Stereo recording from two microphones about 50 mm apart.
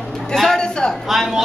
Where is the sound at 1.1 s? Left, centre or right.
Centre.